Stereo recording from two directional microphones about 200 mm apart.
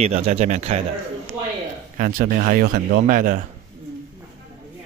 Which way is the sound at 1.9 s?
45° right (ahead or behind).